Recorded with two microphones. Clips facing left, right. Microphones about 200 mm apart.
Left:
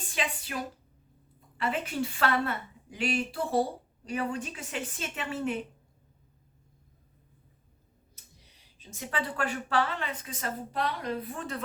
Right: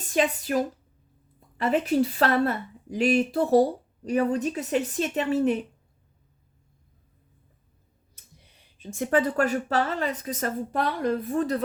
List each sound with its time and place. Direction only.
0.1 s a woman's voice: 45° right (ahead or behind)
8.8 s a woman's voice: 50° right (ahead or behind)